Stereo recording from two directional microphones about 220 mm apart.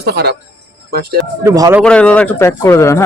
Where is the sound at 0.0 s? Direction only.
45° right (ahead or behind).